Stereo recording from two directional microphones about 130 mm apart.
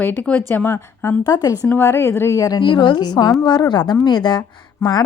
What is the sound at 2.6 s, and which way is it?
A woman's voice, 35° left (ahead or behind).